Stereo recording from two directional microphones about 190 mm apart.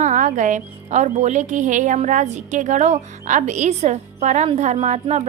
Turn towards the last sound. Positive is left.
turn(degrees=-35)  # may be behind; listen again after turning